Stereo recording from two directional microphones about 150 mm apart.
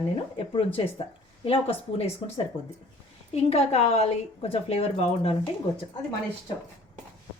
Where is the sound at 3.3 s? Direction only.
45° left (ahead or behind).